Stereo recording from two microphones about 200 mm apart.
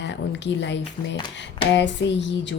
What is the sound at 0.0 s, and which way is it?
Speech, 60° left (ahead or behind).